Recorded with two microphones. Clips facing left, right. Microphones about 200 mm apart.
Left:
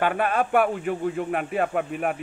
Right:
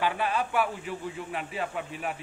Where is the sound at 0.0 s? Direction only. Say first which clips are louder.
Left 5 dB; 55° left (ahead or behind).